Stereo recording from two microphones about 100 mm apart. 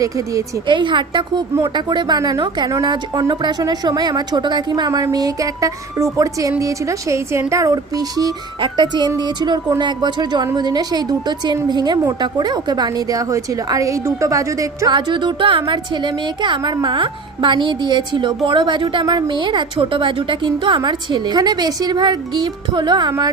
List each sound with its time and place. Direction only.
0.7 s a woman's voice: 55° right (ahead or behind); by 14.8 s 35° right (ahead or behind)
14.8 s a woman's voice: 50° right (ahead or behind)